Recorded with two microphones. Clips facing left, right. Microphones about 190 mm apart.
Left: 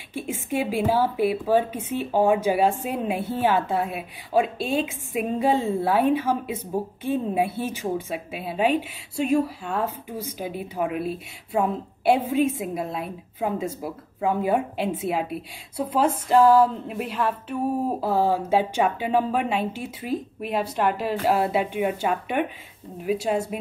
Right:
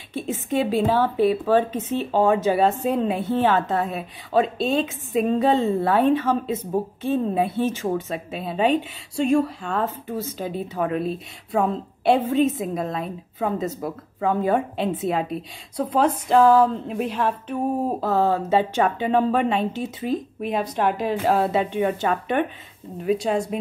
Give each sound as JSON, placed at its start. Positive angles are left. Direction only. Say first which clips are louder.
{"t": 0.1, "sound": "a woman's voice", "louder": "right 3 dB", "side_deg": 10}